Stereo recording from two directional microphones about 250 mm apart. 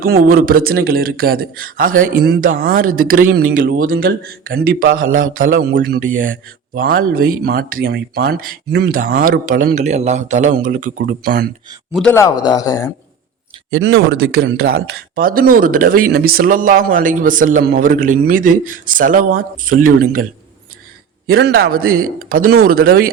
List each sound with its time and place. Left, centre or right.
0.0 s speech: right
11.9 s speech: centre
13.7 s speech: right
21.2 s speech: right